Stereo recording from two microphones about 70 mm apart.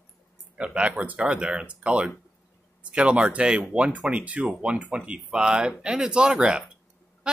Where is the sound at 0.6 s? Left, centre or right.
Centre.